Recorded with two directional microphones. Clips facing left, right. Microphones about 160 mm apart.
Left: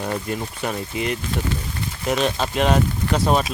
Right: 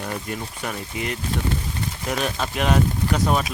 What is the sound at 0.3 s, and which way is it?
Speech, 25° left (ahead or behind).